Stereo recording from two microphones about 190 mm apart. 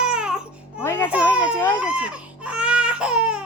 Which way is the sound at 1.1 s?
5° right (ahead or behind).